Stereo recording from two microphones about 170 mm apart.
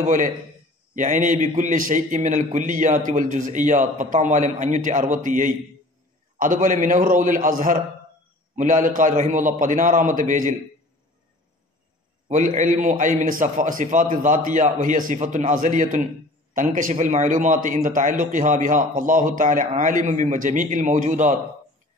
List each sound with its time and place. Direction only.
0.0 s speech: 50° right (ahead or behind)
12.3 s speech: 45° right (ahead or behind)